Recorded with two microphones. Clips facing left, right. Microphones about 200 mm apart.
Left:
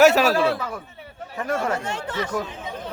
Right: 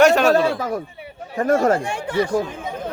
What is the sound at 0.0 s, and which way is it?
Speech, 5° left (ahead or behind).